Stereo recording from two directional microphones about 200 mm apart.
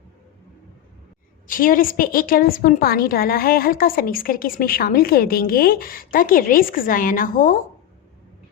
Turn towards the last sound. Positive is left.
turn(degrees=40)  # may be behind; listen again after turning